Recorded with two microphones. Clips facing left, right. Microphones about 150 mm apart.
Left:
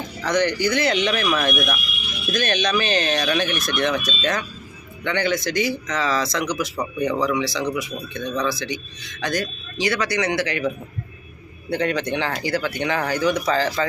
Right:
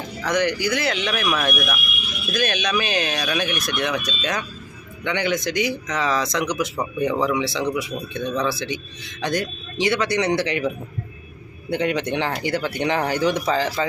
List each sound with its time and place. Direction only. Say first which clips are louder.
0.3 s speech: left 1 dB; 10° right (ahead or behind); by 10.7 s 30° right (ahead or behind)
11.7 s speech: even; 20° right (ahead or behind)
13.5 s speech: left 1 dB; 10° right (ahead or behind)